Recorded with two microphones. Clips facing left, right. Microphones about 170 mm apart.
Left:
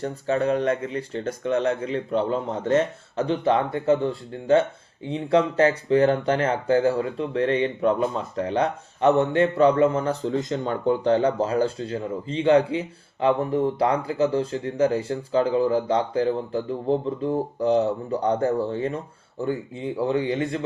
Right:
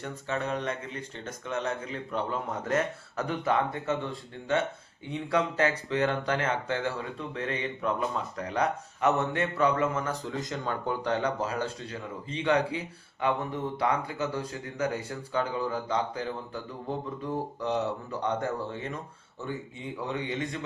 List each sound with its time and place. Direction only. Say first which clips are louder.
0.0 s speech: left 9 dB; 35° left (ahead or behind)